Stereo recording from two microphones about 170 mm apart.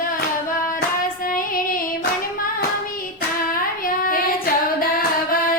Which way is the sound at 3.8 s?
55° left (ahead or behind).